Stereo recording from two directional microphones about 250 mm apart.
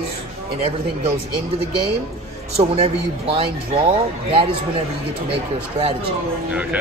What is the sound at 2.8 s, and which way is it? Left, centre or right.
A man's voice, right.